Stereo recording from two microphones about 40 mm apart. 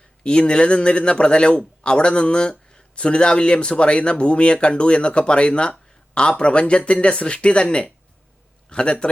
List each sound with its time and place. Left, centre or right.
0.3 s a man's voice: left